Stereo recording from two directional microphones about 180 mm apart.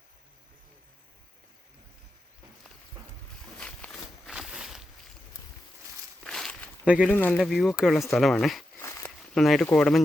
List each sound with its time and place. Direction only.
3.6 s walk: 5° left (ahead or behind)
6.2 s walk: centre (ahead or behind)
6.8 s speech: 5° right (ahead or behind)
7.1 s speech: 10° left (ahead or behind)
7.4 s speech: centre (ahead or behind)
8.8 s a sound: 15° left (ahead or behind)
9.3 s speech: centre (ahead or behind)